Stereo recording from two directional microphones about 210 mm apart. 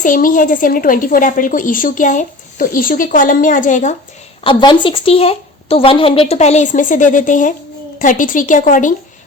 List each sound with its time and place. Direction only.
0.0 s a woman's voice: 40° left (ahead or behind)
4.4 s a woman's voice: 25° left (ahead or behind); by 8.9 s 40° left (ahead or behind)